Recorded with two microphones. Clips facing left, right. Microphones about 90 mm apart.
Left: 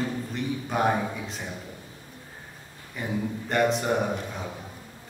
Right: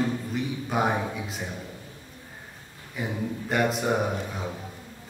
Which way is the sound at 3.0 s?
5° right (ahead or behind).